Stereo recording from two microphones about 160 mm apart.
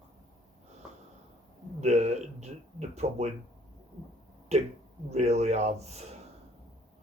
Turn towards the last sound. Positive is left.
turn(degrees=-40)  # may be behind; listen again after turning